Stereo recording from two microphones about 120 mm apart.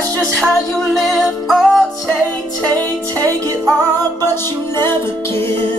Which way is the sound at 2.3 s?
10° left (ahead or behind).